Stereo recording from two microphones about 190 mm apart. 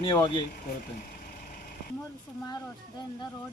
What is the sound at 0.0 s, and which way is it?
Speech, 25° left (ahead or behind).